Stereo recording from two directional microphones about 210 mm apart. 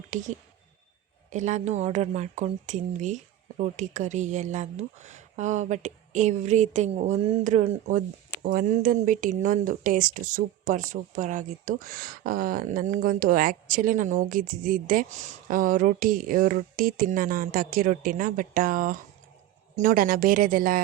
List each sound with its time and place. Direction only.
0.1 s speech: 35° right (ahead or behind)